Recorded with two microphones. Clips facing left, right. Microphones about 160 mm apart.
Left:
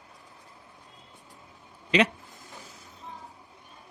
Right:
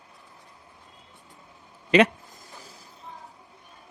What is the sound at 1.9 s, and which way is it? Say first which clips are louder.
Speech: right 5 dB; 50° right (ahead or behind).